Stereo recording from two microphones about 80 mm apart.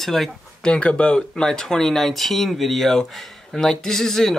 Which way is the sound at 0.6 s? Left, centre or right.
Centre.